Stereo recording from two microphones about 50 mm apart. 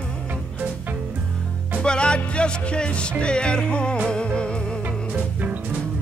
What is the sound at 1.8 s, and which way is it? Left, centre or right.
Music, centre.